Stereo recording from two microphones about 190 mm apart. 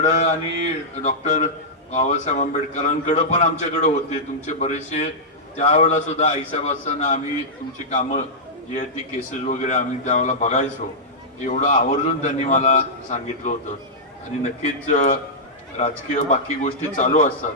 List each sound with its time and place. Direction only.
0.0 s a man's voice: 40° left (ahead or behind)
9.5 s a man's voice: 40° left (ahead or behind)